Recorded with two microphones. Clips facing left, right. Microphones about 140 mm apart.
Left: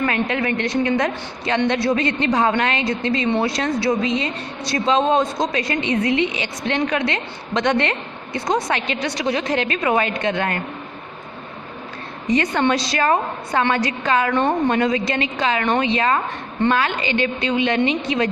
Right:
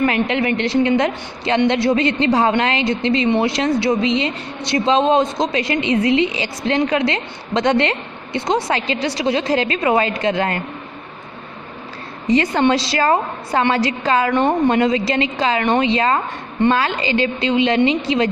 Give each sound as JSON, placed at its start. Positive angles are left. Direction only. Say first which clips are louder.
{"t": 0.0, "sound": "a woman's voice", "louder": "right 3 dB", "side_deg": -25}
{"t": 12.3, "sound": "a woman's voice", "louder": "right 3 dB", "side_deg": -30}
{"t": 14.3, "sound": "speech", "louder": "right 3 dB", "side_deg": -20}